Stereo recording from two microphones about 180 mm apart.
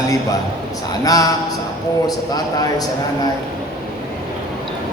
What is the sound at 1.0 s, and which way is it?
A man's voice, 20° left (ahead or behind).